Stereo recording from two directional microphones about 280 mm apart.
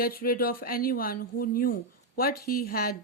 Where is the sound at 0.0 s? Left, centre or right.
Left.